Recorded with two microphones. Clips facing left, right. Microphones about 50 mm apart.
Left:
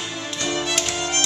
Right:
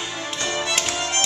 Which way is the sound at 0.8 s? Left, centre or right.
Centre.